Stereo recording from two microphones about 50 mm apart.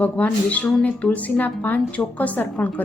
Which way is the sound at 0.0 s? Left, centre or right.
Left.